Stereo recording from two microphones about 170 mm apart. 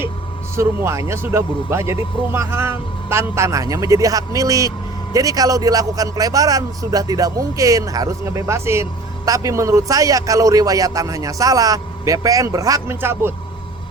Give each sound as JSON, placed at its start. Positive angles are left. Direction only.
{"t": 0.5, "sound": "a man's voice", "side_deg": -15}